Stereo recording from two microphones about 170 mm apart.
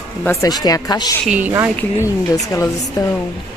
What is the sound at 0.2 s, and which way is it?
Speech, 20° left (ahead or behind).